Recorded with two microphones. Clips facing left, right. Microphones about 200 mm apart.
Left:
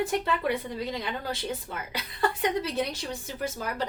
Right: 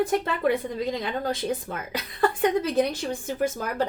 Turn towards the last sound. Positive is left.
turn(degrees=-50)  # may be behind; listen again after turning